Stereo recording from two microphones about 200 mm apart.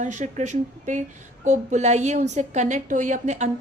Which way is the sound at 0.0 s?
35° right (ahead or behind).